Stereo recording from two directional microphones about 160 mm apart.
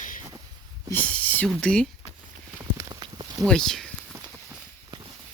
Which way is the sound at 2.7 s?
25° right (ahead or behind).